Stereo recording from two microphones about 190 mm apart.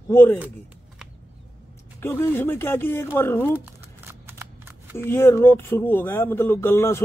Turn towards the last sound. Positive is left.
turn(degrees=15)  # may be behind; listen again after turning